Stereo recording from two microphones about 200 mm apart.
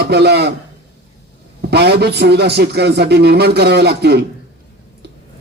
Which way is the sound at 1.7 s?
55° right (ahead or behind).